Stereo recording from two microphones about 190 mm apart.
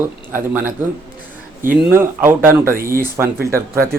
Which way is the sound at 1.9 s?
10° right (ahead or behind).